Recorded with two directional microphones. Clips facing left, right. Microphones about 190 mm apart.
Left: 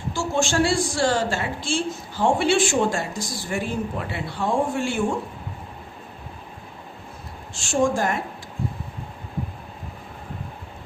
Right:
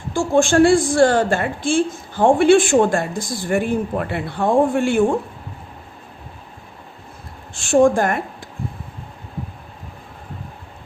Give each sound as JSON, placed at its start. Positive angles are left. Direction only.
{"t": 0.1, "sound": "a woman's voice", "side_deg": -55}
{"t": 7.5, "sound": "a woman's voice", "side_deg": -55}